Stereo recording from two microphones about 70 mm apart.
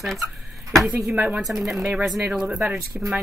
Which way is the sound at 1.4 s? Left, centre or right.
Centre.